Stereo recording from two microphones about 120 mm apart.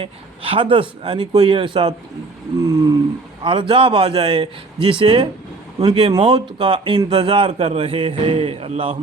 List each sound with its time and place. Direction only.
0.0 s speech: 50° right (ahead or behind)
2.6 s a sound: 25° right (ahead or behind)
3.4 s speech: 45° right (ahead or behind)
7.6 s speech: 60° right (ahead or behind)